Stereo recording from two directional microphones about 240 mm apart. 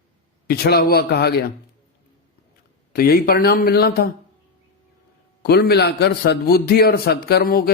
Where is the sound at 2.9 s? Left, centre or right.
Left.